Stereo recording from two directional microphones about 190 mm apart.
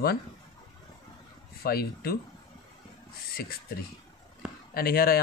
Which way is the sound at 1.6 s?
55° left (ahead or behind).